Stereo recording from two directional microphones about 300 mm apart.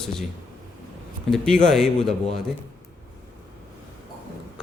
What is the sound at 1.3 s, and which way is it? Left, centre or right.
Speech, centre.